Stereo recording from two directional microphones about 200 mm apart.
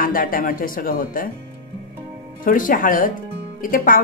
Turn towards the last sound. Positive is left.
turn(degrees=45)  # may be behind; listen again after turning